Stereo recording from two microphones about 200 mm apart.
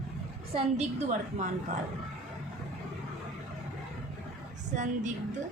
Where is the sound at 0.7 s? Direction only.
40° right (ahead or behind).